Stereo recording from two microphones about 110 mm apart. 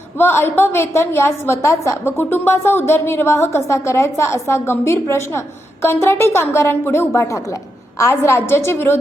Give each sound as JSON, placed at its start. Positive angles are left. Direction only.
{"t": 0.2, "sound": "a woman's voice", "side_deg": 20}